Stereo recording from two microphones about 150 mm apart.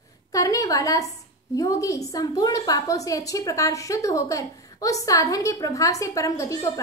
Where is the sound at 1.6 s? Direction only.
20° left (ahead or behind).